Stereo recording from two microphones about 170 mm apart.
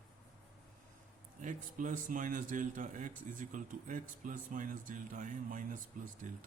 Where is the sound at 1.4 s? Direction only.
50° right (ahead or behind).